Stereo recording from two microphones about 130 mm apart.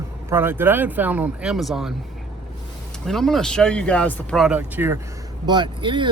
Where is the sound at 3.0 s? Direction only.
5° left (ahead or behind).